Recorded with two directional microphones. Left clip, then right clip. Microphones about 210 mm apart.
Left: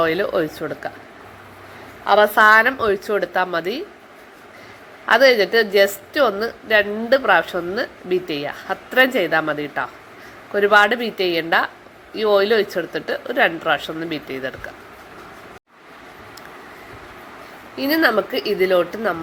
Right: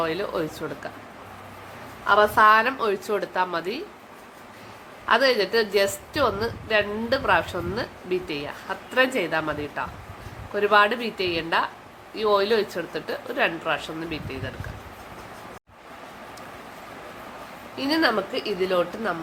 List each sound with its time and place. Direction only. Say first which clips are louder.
0.0 s speech: left 7 dB; 20° left (ahead or behind)
2.0 s a woman's voice: left 4 dB; 15° left (ahead or behind)
5.0 s a woman's voice: left 7 dB; 15° left (ahead or behind)
17.7 s a woman's voice: left 5 dB; 15° left (ahead or behind)